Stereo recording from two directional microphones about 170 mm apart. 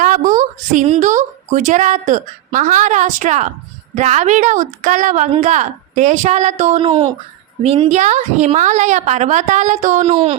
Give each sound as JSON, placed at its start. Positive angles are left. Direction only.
{"t": 0.0, "sound": "a woman's voice", "side_deg": -50}